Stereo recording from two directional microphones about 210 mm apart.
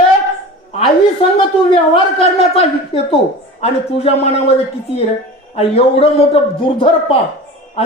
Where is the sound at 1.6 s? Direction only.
25° left (ahead or behind).